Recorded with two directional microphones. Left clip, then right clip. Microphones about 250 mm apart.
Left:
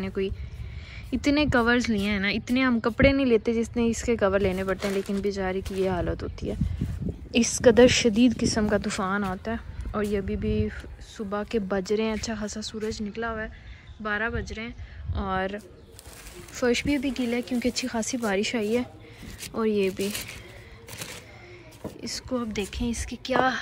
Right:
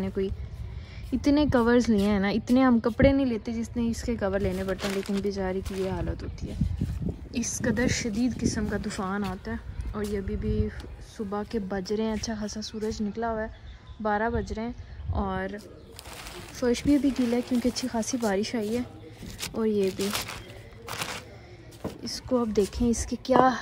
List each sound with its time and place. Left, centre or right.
0.0 s speech: centre
20.8 s a sound: centre
22.5 s speech: right